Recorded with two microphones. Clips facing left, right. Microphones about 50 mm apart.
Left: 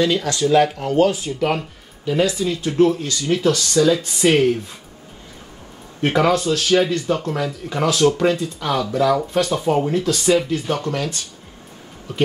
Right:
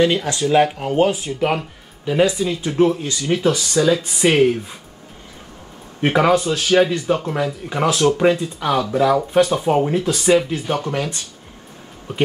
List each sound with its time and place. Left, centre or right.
0.0 s speech: right
6.0 s speech: centre